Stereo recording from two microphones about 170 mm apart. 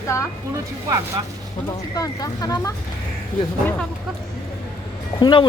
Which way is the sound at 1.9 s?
20° left (ahead or behind).